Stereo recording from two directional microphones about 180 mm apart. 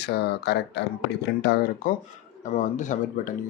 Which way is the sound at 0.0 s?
65° left (ahead or behind).